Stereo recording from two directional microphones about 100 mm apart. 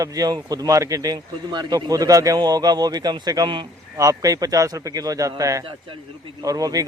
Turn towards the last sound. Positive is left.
turn(degrees=-35)  # may be behind; listen again after turning